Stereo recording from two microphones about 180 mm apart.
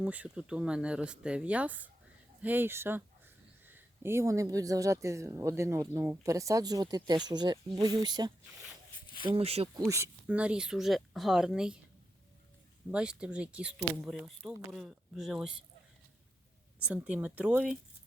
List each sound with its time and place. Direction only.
0.0 s speech: 10° right (ahead or behind); by 9.6 s 35° right (ahead or behind)
9.7 s speech: 15° right (ahead or behind)
12.9 s speech: 5° right (ahead or behind)
16.8 s speech: 5° right (ahead or behind)